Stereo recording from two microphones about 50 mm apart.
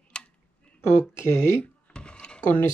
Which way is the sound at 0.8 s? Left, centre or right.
Left.